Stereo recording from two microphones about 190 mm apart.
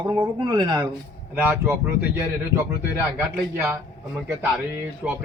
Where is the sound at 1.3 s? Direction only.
10° right (ahead or behind).